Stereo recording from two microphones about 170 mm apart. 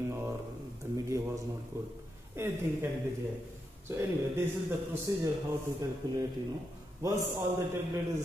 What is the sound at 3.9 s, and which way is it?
A man's voice, 15° right (ahead or behind).